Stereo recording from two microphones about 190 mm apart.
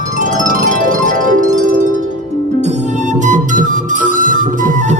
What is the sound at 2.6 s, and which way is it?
Music, 35° right (ahead or behind).